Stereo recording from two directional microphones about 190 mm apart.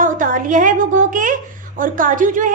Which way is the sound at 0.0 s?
45° right (ahead or behind).